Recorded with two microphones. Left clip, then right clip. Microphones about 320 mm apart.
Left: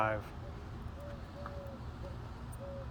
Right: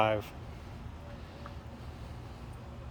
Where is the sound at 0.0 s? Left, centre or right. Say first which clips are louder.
Right 5 dB; right.